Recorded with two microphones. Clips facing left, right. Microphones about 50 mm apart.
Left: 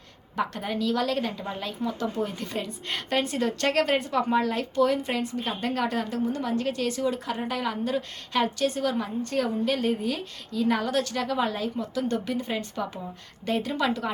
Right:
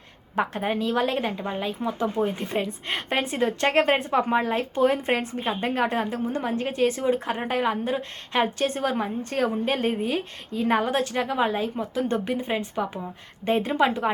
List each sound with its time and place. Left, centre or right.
0.3 s a woman's voice: right